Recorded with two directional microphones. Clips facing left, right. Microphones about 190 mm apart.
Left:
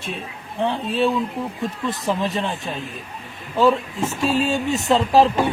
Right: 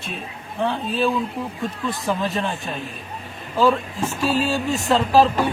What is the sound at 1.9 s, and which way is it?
Speech, 20° left (ahead or behind).